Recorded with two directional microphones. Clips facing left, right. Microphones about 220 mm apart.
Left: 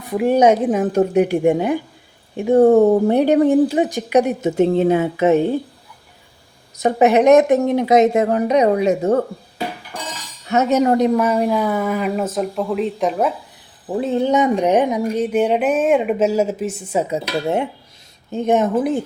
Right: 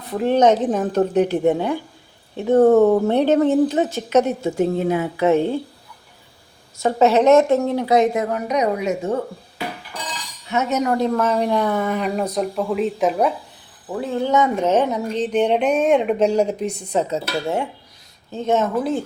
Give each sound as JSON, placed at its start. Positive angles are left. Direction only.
{"t": 0.0, "sound": "speech", "side_deg": 10}
{"t": 6.7, "sound": "a woman's voice", "side_deg": 15}
{"t": 10.5, "sound": "cutlery", "side_deg": 35}
{"t": 10.9, "sound": "speech", "side_deg": 15}
{"t": 13.8, "sound": "speech", "side_deg": 25}
{"t": 18.3, "sound": "speech", "side_deg": 15}